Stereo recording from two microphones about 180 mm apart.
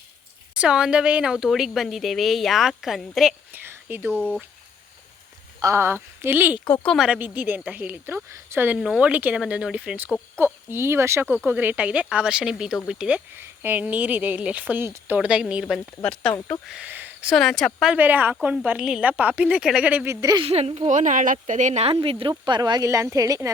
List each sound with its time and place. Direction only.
0.5 s a woman's voice: 5° right (ahead or behind)
3.6 s whispering: 10° right (ahead or behind)
4.1 s speech: 5° left (ahead or behind)
5.5 s a woman's voice: 15° right (ahead or behind); by 16.4 s 5° left (ahead or behind)
16.6 s speech: 5° right (ahead or behind)
20.2 s speech: 25° right (ahead or behind)